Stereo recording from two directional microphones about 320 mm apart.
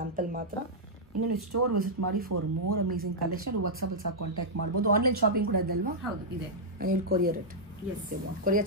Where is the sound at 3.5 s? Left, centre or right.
Right.